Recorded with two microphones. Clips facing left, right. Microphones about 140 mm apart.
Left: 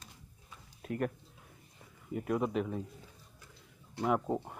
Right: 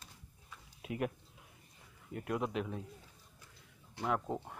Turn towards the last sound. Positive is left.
turn(degrees=10)  # may be behind; listen again after turning